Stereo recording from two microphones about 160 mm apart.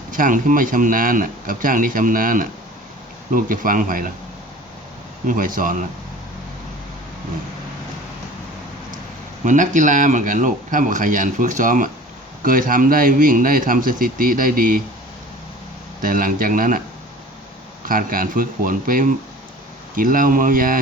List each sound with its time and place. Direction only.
0.1 s speech: 55° right (ahead or behind)
5.2 s speech: 55° right (ahead or behind)
9.4 s speech: 50° right (ahead or behind)
16.0 s speech: 60° right (ahead or behind)
17.8 s speech: 60° right (ahead or behind)